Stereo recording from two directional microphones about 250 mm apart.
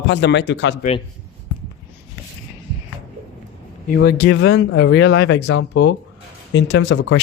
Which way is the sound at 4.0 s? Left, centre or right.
Left.